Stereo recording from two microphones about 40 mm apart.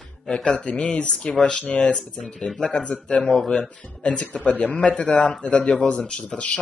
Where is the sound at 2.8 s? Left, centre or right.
Left.